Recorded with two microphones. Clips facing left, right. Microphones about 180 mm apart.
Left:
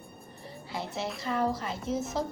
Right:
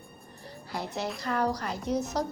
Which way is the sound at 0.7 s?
Centre (ahead or behind).